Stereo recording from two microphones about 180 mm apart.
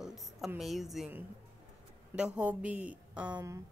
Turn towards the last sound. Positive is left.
turn(degrees=-20)  # may be behind; listen again after turning